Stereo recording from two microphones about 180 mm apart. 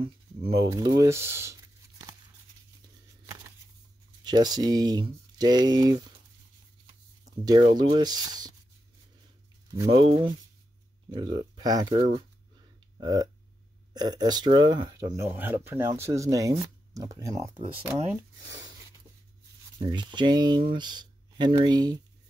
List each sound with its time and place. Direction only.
0.7 s a sound: 20° right (ahead or behind)
4.2 s speech: 20° right (ahead or behind)
7.2 s speech: 25° right (ahead or behind)
9.8 s speech: 30° right (ahead or behind)
12.9 s speech: 20° right (ahead or behind)
19.8 s speech: 25° right (ahead or behind)